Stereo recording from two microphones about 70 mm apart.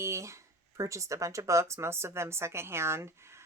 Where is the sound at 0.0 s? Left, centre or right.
Right.